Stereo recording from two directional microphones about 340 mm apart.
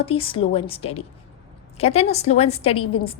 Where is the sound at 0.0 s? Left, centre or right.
Centre.